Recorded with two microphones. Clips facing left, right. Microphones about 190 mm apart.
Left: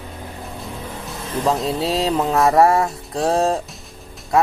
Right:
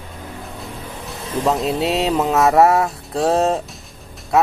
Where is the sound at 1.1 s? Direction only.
Centre (ahead or behind).